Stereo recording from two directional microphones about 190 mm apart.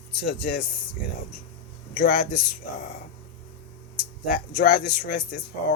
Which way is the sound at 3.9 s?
55° left (ahead or behind).